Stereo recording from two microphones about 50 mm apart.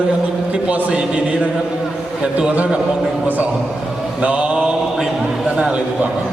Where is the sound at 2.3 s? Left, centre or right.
Right.